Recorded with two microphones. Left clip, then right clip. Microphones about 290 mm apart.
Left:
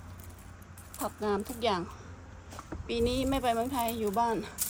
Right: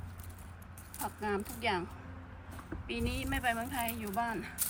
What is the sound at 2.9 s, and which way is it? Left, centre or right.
Speech, centre.